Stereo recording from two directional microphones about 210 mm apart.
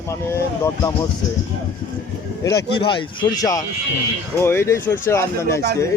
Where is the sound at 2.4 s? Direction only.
15° left (ahead or behind).